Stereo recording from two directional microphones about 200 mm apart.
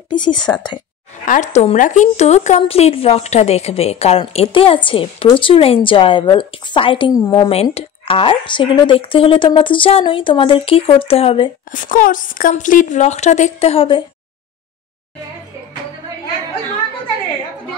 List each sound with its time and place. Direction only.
0.1 s a woman's voice: 25° left (ahead or behind)
1.2 s a woman's voice: 40° left (ahead or behind)
11.7 s speech: 40° left (ahead or behind); by 14.0 s 25° left (ahead or behind)